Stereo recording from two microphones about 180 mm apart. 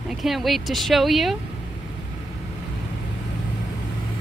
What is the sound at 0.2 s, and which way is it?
Speech, centre (ahead or behind).